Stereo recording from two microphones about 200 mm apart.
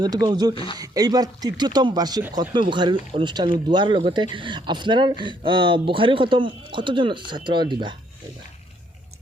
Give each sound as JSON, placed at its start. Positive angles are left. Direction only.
{"t": 0.0, "sound": "speech", "side_deg": -20}
{"t": 0.5, "sound": "speech", "side_deg": 25}
{"t": 0.8, "sound": "speech", "side_deg": -20}